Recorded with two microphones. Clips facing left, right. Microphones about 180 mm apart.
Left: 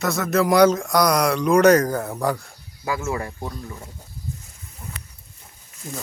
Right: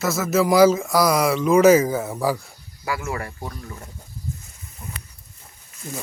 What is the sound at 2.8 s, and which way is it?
Speech, 20° left (ahead or behind).